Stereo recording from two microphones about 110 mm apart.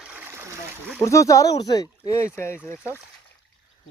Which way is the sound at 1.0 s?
30° left (ahead or behind).